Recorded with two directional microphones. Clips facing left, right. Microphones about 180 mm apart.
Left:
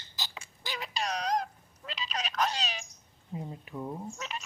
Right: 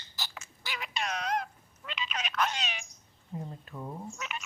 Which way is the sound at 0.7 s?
35° left (ahead or behind).